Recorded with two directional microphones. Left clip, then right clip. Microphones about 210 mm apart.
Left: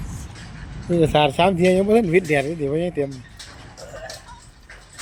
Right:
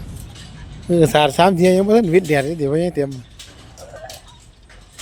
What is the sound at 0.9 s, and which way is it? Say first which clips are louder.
Speech: right 3 dB; 35° right (ahead or behind).